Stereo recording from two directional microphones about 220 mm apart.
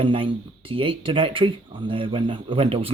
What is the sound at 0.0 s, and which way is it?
Speech, 25° right (ahead or behind).